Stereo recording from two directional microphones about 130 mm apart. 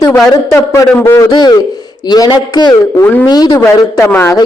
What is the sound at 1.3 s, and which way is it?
A man's voice, 30° left (ahead or behind).